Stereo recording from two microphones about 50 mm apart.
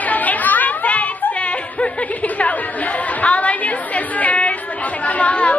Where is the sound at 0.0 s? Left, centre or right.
Left.